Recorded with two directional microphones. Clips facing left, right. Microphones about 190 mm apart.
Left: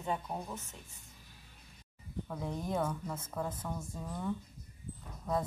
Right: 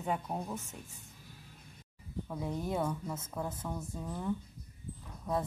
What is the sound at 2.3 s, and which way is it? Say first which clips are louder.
Speech: right 1 dB; 5° right (ahead or behind).